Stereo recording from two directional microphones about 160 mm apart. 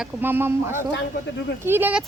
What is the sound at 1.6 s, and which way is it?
Speech, 15° right (ahead or behind).